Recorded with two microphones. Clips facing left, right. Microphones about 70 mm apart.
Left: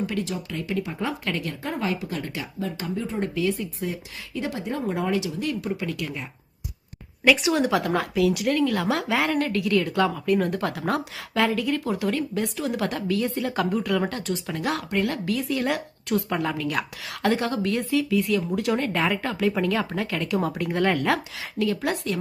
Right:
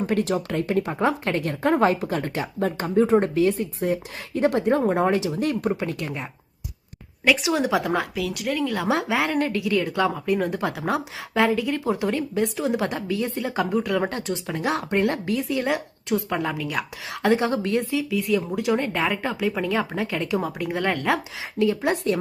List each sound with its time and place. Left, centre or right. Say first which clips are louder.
0.0 s speech: right 5 dB; right
3.3 s speech: right 5 dB; right
7.3 s speech: left 1 dB; centre
8.9 s speech: right 2 dB; centre
9.1 s a woman's voice: even; centre
11.8 s speech: right 2 dB; right
13.3 s speech: even; centre
13.7 s a woman's voice: right 1 dB; centre
14.0 s speech: right 1 dB; right
15.6 s a woman's voice: right 1 dB; centre
17.5 s speech: right 2 dB; right
17.9 s a woman's voice: left 1 dB; centre
21.6 s speech: right 3 dB; centre